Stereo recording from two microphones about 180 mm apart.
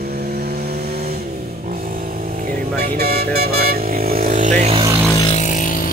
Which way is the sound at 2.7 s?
60° right (ahead or behind).